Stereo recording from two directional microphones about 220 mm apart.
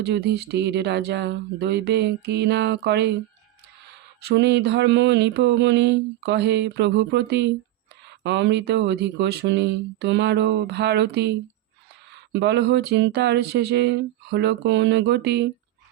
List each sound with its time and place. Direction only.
0.0 s mantra: 50° right (ahead or behind)
4.2 s mantra: 50° right (ahead or behind)